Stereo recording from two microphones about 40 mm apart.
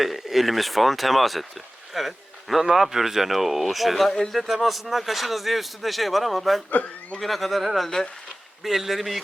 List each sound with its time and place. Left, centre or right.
0.0 s a man's voice: centre
1.9 s a sound: centre
2.6 s a man's voice: centre
6.7 s speech: left
7.2 s a man's voice: centre